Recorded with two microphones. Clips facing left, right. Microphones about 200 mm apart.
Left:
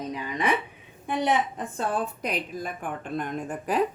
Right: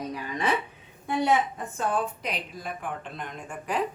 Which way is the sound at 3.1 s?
45° left (ahead or behind).